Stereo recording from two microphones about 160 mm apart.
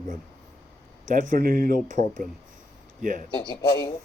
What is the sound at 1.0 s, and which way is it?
Speech, 55° right (ahead or behind).